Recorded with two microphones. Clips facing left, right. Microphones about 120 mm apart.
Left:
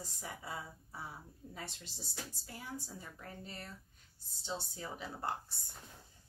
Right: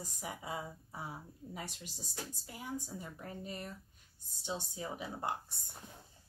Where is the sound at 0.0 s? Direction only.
15° right (ahead or behind).